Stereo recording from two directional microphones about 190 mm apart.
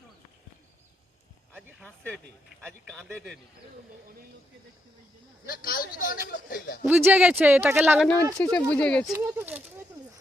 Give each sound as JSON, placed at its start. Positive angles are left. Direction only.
{"t": 1.8, "sound": "speech", "side_deg": 5}
{"t": 5.5, "sound": "a man's voice", "side_deg": 50}
{"t": 6.8, "sound": "speech", "side_deg": -10}
{"t": 8.4, "sound": "speech", "side_deg": 5}
{"t": 9.1, "sound": "speech", "side_deg": -10}